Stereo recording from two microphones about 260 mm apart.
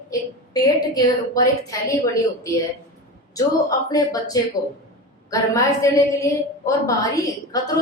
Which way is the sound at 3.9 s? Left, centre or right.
Centre.